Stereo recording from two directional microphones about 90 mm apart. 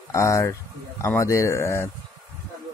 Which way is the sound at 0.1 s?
30° left (ahead or behind).